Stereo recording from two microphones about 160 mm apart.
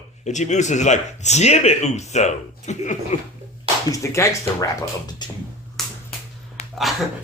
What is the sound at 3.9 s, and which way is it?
Speech, 20° left (ahead or behind).